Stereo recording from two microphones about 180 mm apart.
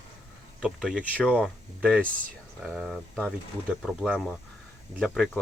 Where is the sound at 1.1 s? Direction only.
5° left (ahead or behind).